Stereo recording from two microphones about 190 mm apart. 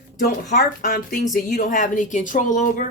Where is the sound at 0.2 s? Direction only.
50° left (ahead or behind).